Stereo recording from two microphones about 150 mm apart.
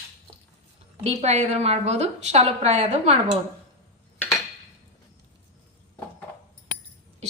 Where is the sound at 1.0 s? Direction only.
45° right (ahead or behind).